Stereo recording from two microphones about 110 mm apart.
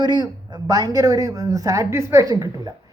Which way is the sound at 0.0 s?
40° right (ahead or behind).